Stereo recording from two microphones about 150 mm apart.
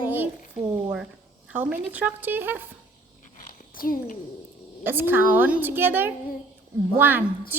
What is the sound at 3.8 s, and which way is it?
Speech, 65° left (ahead or behind).